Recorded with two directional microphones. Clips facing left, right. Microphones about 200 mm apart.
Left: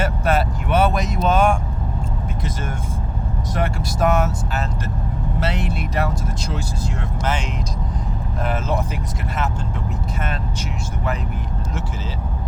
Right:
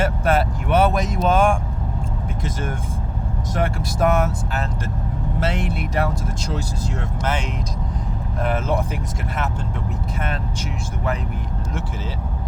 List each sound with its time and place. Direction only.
0.0 s speech: 50° right (ahead or behind)